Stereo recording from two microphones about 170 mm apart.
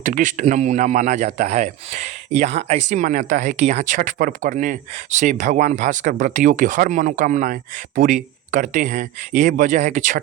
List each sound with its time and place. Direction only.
0.0 s speech: 50° right (ahead or behind)